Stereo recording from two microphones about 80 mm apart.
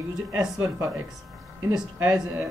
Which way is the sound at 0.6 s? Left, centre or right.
Right.